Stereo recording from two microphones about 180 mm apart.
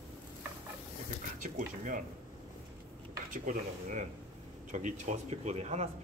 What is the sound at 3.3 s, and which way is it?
Speech, 45° right (ahead or behind).